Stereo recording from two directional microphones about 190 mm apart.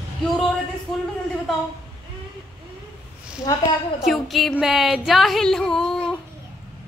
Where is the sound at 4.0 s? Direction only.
Centre (ahead or behind).